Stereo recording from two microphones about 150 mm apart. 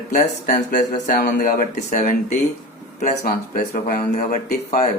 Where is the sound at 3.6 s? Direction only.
50° left (ahead or behind).